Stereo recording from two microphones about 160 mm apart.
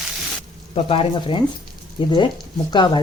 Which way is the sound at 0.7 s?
35° left (ahead or behind).